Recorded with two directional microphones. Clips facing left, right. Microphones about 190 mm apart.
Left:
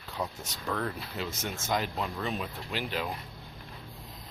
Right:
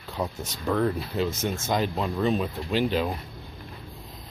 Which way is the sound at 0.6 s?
30° right (ahead or behind).